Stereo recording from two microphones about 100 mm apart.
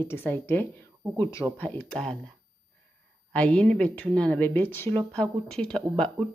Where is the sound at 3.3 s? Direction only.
10° left (ahead or behind).